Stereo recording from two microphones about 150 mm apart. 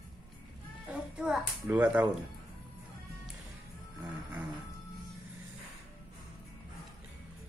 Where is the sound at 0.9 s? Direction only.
5° right (ahead or behind).